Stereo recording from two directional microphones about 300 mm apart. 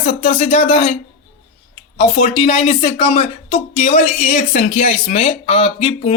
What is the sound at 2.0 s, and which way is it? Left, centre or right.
Speech, left.